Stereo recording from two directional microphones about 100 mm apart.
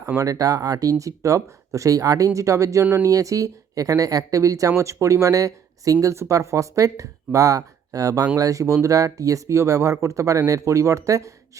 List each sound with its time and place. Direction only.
0.2 s speech: 35° right (ahead or behind)